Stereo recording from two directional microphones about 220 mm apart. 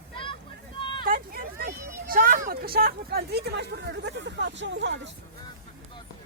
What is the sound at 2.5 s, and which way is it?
Speech, 45° right (ahead or behind).